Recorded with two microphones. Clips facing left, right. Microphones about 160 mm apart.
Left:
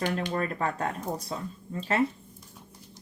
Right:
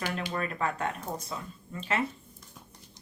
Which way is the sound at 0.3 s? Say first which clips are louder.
Left 2 dB; 35° left (ahead or behind).